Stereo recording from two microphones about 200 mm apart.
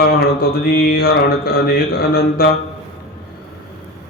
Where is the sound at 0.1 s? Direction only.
50° left (ahead or behind).